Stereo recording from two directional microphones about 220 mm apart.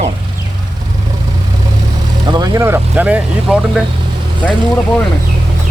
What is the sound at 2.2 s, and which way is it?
Speech, 20° right (ahead or behind).